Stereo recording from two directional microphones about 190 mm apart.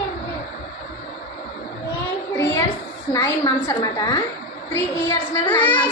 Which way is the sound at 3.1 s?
15° left (ahead or behind).